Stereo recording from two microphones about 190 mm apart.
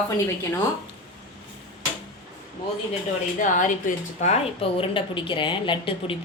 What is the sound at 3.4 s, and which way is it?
A woman's voice, 45° left (ahead or behind).